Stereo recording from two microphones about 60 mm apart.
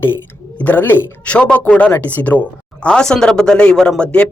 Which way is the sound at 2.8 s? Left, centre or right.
Centre.